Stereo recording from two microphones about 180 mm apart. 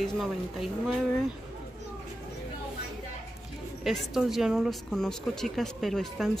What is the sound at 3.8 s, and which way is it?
A woman's voice, centre (ahead or behind).